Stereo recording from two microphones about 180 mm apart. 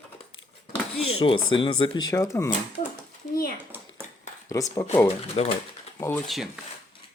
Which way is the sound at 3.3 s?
55° left (ahead or behind).